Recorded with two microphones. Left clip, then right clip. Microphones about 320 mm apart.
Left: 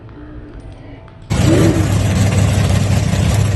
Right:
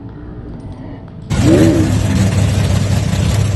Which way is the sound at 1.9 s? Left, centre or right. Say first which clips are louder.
Right 1 dB; centre.